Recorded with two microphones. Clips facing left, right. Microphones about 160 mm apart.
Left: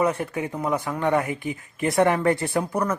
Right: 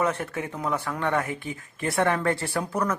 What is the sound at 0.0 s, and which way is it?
Speech, 10° left (ahead or behind).